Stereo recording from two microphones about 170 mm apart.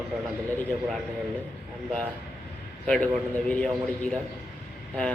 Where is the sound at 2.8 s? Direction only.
5° left (ahead or behind).